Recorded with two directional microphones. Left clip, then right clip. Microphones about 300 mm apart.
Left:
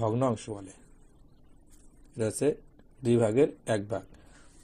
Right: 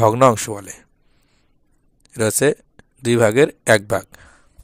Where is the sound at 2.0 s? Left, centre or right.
Right.